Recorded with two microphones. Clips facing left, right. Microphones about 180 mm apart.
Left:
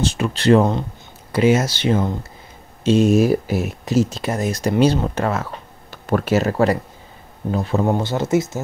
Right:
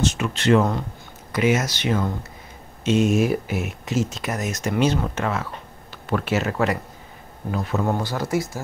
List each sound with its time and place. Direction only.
0.0 s speech: 35° left (ahead or behind)